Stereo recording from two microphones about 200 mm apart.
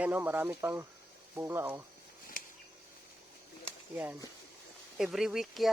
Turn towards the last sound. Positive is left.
turn(degrees=0)  # may be behind; listen again after turning